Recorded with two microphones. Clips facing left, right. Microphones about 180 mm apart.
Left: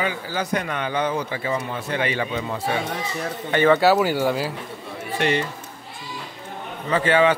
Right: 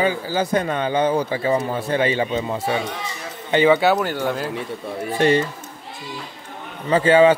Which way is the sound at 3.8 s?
5° left (ahead or behind).